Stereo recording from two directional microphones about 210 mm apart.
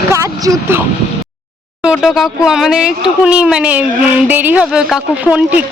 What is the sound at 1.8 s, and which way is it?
Speech, centre (ahead or behind).